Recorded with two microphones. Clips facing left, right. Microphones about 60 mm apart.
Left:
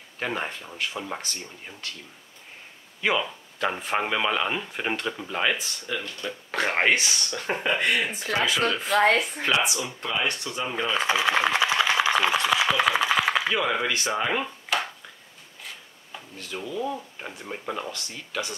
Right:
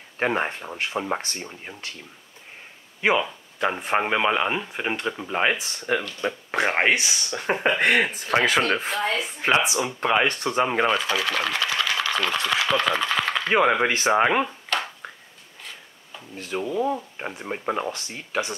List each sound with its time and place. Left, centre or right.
0.2 s speech: right
1.7 s speech: right
3.0 s speech: centre
5.3 s speech: right
5.6 s speech: right
6.5 s speech: centre
7.6 s speech: right
8.9 s speech: left
9.8 s speech: right
11.0 s speech: left
13.5 s speech: right
14.7 s finger snapping: centre
16.3 s speech: right